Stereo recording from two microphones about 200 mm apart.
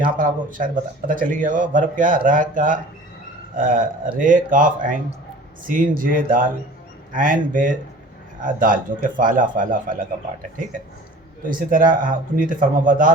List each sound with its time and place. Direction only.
0.0 s speech: 40° right (ahead or behind)
11.4 s speech: 45° right (ahead or behind)